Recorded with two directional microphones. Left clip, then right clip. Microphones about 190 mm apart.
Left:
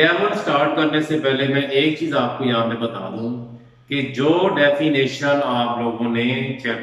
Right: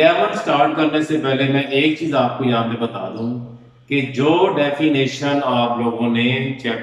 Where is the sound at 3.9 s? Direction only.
10° right (ahead or behind).